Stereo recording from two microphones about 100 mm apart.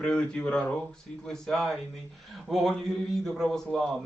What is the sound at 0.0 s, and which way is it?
A man's voice, 10° left (ahead or behind).